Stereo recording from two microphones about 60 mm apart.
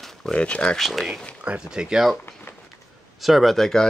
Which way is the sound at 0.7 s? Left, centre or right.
Centre.